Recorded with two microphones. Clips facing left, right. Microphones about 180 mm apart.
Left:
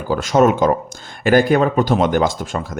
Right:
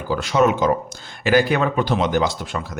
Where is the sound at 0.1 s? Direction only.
45° left (ahead or behind).